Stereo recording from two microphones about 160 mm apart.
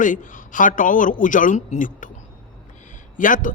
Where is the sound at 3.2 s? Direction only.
55° left (ahead or behind).